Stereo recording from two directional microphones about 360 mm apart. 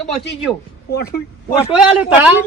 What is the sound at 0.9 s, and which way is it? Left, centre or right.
Speech, left.